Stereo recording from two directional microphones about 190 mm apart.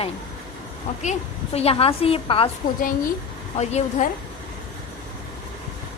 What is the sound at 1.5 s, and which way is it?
Speech, 30° left (ahead or behind).